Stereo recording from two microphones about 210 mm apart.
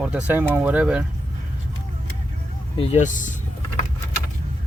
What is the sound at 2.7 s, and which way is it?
Speech, 30° left (ahead or behind).